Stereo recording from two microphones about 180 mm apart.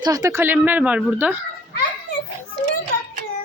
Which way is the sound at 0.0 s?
20° right (ahead or behind).